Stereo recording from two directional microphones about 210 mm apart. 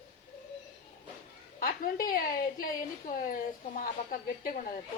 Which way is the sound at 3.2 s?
40° left (ahead or behind).